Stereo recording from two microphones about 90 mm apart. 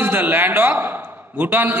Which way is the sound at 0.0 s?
20° right (ahead or behind).